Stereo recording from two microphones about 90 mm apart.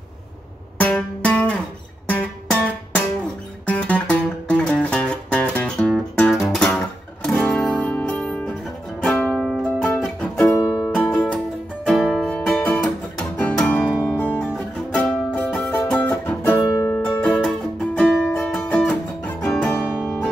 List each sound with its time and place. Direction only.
0.7 s music: 15° left (ahead or behind)
10.5 s music: 35° left (ahead or behind)
11.3 s music: centre (ahead or behind)
12.3 s music: 10° left (ahead or behind)
14.4 s music: 5° left (ahead or behind)
17.4 s music: 5° left (ahead or behind)